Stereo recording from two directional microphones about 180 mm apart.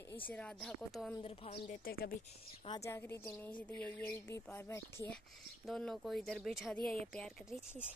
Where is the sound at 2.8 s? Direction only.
15° left (ahead or behind).